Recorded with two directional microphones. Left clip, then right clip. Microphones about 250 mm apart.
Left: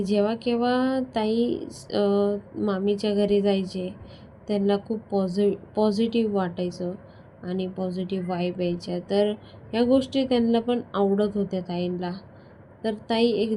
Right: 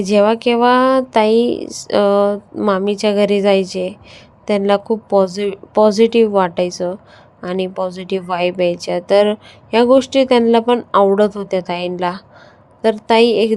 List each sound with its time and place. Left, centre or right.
0.0 s a woman's voice: right